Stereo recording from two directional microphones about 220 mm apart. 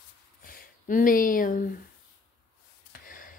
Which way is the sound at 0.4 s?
40° left (ahead or behind).